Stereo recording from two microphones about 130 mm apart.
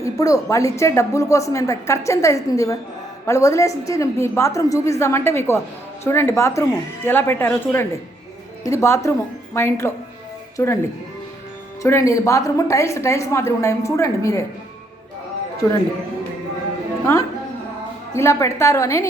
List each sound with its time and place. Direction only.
0.0 s a woman's voice: 25° left (ahead or behind)
11.8 s a woman's voice: 20° left (ahead or behind)
18.1 s a woman's voice: 20° left (ahead or behind)